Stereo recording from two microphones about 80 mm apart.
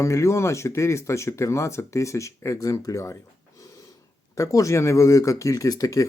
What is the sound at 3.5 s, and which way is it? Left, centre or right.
Snort, left.